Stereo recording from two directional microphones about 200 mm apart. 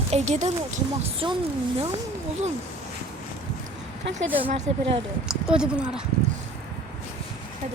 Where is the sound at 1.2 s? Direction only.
25° right (ahead or behind).